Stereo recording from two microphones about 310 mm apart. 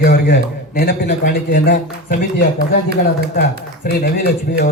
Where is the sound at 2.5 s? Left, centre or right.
Right.